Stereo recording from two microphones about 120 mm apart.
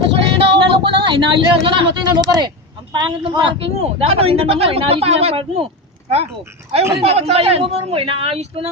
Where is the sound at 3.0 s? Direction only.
40° right (ahead or behind).